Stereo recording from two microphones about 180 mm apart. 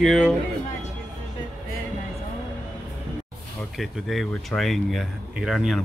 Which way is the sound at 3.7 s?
Centre (ahead or behind).